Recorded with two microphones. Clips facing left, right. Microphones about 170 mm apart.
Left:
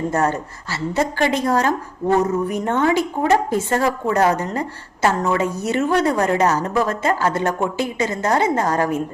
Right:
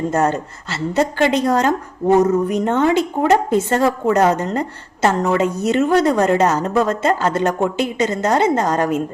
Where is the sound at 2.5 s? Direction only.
20° right (ahead or behind).